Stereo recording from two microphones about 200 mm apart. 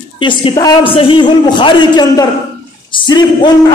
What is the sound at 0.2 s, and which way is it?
A man's voice, 25° left (ahead or behind).